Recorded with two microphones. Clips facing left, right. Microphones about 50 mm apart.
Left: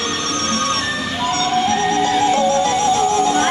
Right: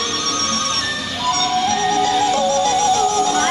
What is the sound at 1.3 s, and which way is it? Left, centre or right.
Music, left.